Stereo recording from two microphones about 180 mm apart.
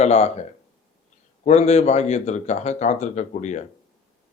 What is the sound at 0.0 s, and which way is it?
Speech, 40° left (ahead or behind).